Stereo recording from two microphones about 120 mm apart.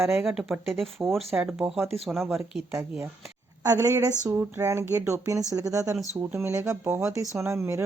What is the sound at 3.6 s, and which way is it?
Speech, 25° right (ahead or behind).